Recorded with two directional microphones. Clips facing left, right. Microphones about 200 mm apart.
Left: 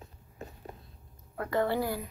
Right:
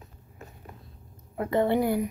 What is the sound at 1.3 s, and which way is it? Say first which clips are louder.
Speech: right 5 dB; 20° right (ahead or behind).